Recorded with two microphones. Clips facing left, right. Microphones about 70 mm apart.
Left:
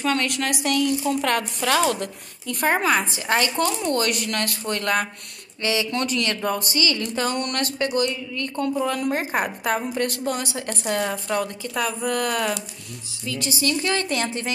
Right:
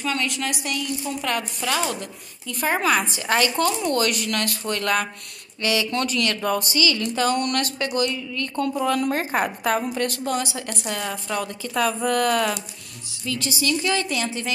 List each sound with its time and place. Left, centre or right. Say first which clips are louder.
0.0 s speech: left 2 dB; left
2.7 s speech: even; left
6.7 s speech: right 1 dB; left; by 9.8 s centre
9.9 s a woman's voice: even; left